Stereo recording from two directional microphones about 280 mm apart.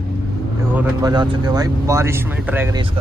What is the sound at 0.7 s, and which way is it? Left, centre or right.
Speech, centre.